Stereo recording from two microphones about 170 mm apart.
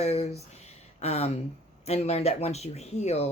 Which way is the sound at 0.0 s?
35° left (ahead or behind).